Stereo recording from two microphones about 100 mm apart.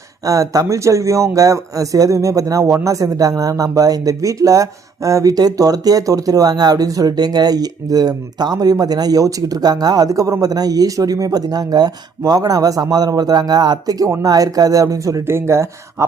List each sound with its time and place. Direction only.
0.3 s speech: 35° right (ahead or behind)